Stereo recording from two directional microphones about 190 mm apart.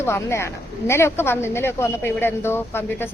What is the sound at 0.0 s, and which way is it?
Speech, 15° left (ahead or behind).